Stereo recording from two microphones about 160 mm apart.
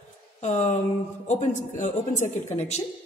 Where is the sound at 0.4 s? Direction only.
45° left (ahead or behind).